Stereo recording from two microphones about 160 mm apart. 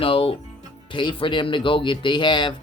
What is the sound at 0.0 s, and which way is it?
Speech, 35° left (ahead or behind).